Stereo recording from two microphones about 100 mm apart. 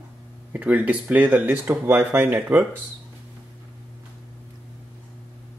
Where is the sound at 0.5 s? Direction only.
15° right (ahead or behind).